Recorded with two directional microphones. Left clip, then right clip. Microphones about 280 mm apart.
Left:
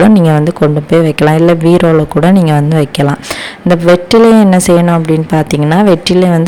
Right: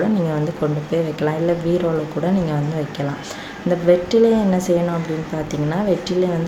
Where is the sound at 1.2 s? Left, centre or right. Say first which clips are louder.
Left 12 dB; left.